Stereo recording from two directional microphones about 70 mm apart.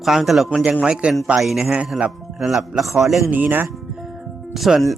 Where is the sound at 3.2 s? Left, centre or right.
Right.